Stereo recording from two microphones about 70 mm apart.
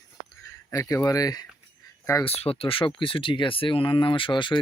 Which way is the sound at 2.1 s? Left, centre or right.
Left.